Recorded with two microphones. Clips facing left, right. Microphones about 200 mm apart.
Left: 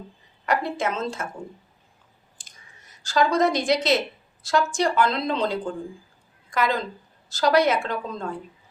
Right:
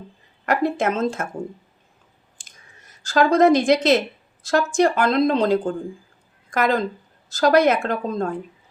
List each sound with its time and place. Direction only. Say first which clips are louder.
0.4 s a woman's voice: right 4 dB; 50° right (ahead or behind)
3.1 s a woman's voice: right 6 dB; 50° right (ahead or behind)